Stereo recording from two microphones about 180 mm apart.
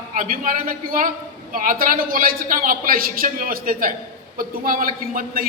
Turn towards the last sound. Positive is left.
turn(degrees=-50)  # may be behind; listen again after turning